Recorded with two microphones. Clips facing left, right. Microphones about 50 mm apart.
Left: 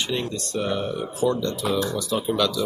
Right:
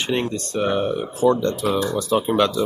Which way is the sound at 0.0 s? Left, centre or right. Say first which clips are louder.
Right 4 dB; right.